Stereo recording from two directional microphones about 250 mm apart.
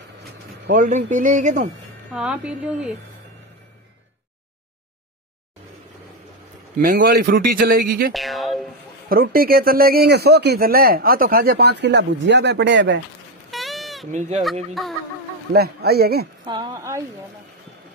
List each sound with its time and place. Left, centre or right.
0.7 s a man's voice: right
2.1 s speech: centre
6.8 s a man's voice: right
8.1 s a woman's voice: centre
9.1 s a man's voice: right
13.5 s goat: centre
14.4 s speech: centre
15.5 s a man's voice: right
16.4 s speech: centre